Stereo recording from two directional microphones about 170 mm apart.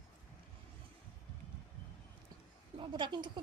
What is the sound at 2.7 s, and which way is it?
Speech, 30° right (ahead or behind).